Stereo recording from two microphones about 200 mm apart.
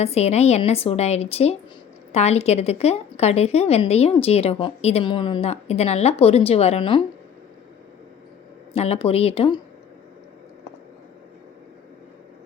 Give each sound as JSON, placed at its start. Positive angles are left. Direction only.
{"t": 0.0, "sound": "a woman's voice", "side_deg": 30}
{"t": 8.7, "sound": "speech", "side_deg": 30}